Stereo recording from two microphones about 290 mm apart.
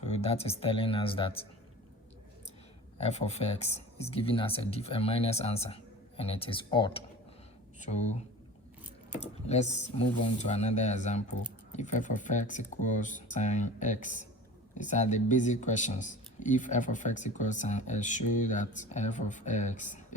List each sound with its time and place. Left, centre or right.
0.0 s speech: left
3.0 s speech: left
9.2 s speech: left